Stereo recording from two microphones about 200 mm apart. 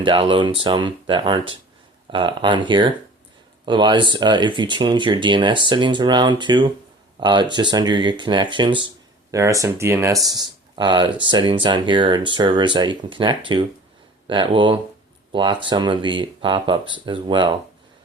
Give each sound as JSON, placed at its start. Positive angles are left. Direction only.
{"t": 0.0, "sound": "speech", "side_deg": -25}